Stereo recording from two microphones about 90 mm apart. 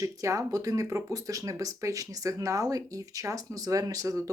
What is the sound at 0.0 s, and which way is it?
Speech, 35° right (ahead or behind).